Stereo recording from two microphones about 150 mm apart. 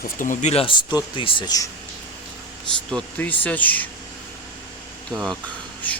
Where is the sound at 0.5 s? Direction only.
35° left (ahead or behind).